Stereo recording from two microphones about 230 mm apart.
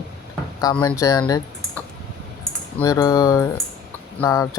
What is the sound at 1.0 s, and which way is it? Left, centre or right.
Speech, centre.